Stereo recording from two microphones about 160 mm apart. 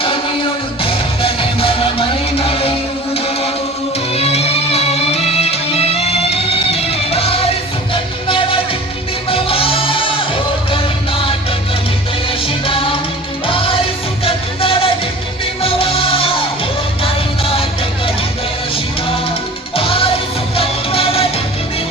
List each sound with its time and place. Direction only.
0.8 s music: 35° left (ahead or behind)
12.6 s music: 35° left (ahead or behind)
19.7 s music: 35° left (ahead or behind)